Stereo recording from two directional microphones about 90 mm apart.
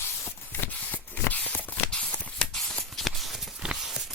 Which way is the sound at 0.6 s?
20° left (ahead or behind).